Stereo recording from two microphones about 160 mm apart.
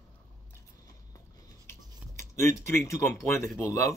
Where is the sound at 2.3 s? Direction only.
15° left (ahead or behind).